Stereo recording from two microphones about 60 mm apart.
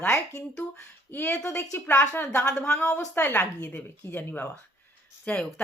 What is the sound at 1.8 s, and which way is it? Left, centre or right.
Speech, left.